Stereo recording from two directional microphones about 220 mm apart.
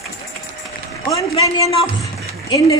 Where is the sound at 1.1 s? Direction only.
20° left (ahead or behind).